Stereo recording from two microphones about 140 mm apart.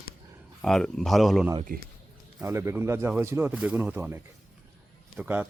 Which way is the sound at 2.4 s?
20° right (ahead or behind).